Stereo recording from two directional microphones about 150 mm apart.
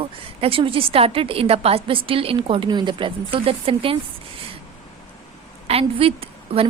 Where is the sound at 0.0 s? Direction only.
40° right (ahead or behind).